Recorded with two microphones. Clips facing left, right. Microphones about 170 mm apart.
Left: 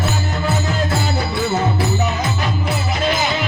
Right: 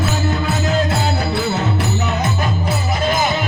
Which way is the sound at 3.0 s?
50° right (ahead or behind).